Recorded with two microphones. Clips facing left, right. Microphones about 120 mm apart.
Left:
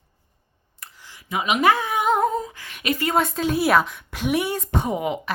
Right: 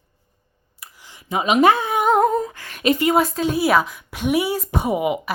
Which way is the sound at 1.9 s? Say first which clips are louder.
Right 4 dB; 45° right (ahead or behind).